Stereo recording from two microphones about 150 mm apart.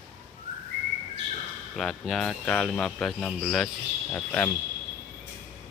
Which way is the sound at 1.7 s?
Centre (ahead or behind).